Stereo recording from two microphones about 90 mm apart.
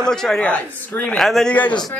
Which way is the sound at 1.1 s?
5° left (ahead or behind).